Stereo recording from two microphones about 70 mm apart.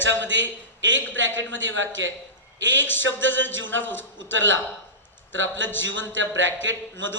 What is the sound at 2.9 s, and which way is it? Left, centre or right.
A man's voice, left.